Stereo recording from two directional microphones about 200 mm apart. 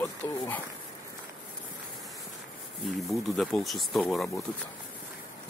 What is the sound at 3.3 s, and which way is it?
Speech, 5° left (ahead or behind).